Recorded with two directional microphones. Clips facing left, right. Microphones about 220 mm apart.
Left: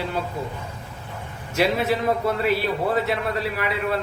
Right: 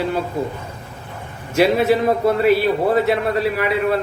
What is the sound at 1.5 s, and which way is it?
Speech, 10° right (ahead or behind).